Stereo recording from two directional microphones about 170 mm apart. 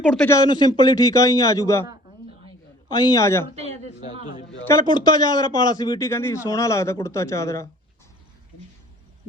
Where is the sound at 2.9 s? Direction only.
25° left (ahead or behind).